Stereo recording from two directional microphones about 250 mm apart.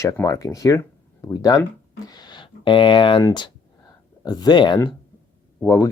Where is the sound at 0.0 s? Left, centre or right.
Centre.